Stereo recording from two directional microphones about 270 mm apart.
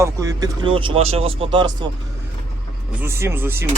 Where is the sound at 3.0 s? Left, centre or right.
Centre.